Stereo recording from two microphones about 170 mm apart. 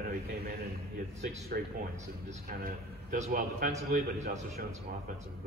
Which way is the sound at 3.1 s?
55° right (ahead or behind).